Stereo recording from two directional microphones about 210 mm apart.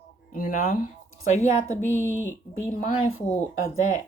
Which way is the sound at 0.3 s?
40° left (ahead or behind).